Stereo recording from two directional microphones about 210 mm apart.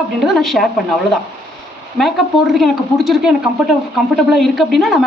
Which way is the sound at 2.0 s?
Centre (ahead or behind).